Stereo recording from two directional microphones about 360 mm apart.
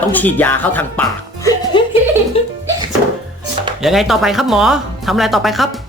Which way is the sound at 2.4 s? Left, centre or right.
Centre.